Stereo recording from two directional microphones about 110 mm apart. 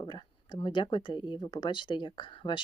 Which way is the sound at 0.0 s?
45° left (ahead or behind).